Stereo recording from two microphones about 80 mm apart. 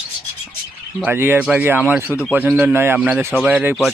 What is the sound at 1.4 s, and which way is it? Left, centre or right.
Speech, centre.